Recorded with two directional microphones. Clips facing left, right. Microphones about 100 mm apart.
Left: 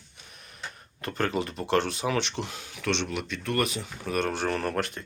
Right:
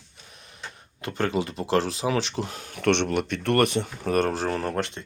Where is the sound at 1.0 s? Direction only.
20° right (ahead or behind); by 2.8 s 40° right (ahead or behind).